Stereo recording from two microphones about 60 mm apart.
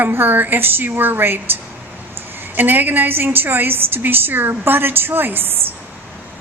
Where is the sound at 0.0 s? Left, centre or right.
Right.